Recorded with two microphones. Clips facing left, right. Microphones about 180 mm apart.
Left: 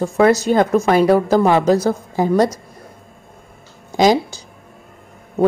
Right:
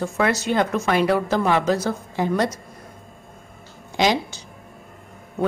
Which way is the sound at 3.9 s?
40° left (ahead or behind).